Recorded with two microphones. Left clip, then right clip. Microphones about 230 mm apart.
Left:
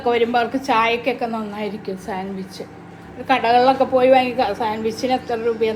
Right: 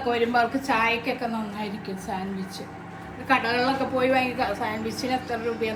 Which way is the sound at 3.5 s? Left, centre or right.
Centre.